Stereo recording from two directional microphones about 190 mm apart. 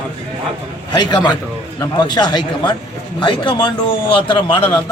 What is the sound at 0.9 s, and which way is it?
A man's voice, 20° left (ahead or behind).